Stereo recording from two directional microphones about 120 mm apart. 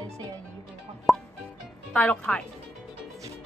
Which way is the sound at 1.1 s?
Centre (ahead or behind).